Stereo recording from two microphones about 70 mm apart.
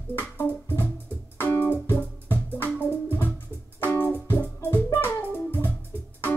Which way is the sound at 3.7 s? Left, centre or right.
Left.